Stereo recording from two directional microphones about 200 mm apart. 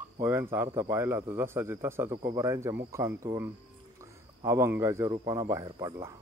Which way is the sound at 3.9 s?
15° right (ahead or behind).